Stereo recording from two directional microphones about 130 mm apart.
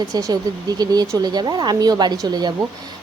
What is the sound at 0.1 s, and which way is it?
Speech, 30° right (ahead or behind).